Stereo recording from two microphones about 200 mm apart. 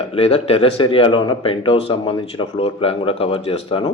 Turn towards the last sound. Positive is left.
turn(degrees=25)  # may be behind; listen again after turning